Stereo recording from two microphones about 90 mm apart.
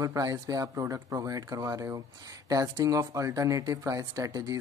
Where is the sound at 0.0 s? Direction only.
40° right (ahead or behind).